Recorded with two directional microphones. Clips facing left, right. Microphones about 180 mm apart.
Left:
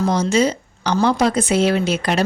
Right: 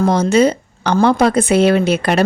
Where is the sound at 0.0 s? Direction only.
55° right (ahead or behind).